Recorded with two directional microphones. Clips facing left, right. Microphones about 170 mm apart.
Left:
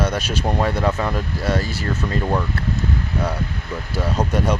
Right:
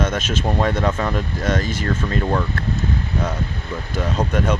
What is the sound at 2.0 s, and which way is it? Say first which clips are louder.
Speech: left 2 dB; 10° left (ahead or behind).